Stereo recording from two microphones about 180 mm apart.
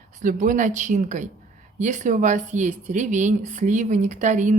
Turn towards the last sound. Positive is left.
turn(degrees=-40)  # may be behind; listen again after turning